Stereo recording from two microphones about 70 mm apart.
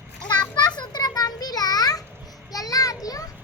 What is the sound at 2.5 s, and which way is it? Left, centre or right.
Children playing, left.